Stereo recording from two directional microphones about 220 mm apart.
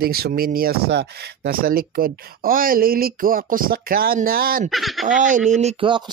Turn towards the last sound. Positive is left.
turn(degrees=-20)  # may be behind; listen again after turning